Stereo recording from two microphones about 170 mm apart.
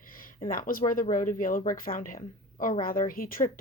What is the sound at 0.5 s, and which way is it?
Speech, 55° left (ahead or behind).